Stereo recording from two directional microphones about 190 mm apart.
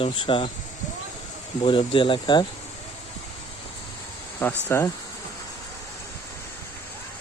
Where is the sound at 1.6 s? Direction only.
25° left (ahead or behind).